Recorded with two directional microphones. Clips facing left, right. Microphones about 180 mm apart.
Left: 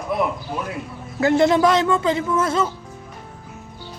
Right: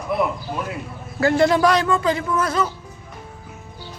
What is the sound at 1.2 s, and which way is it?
A man's voice, 20° left (ahead or behind).